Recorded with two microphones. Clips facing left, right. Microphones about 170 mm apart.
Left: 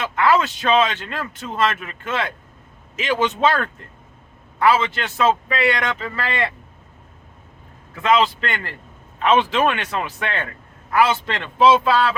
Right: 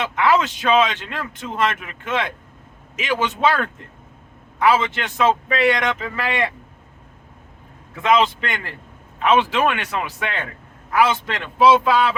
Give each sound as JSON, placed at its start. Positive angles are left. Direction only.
{"t": 0.0, "sound": "a man's voice", "side_deg": -15}
{"t": 8.0, "sound": "a man's voice", "side_deg": -15}